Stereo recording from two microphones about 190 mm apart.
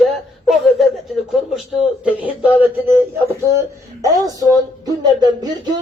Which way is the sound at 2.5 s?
10° right (ahead or behind).